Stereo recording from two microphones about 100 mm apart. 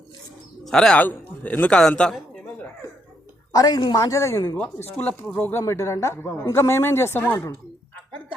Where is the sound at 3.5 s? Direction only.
40° left (ahead or behind).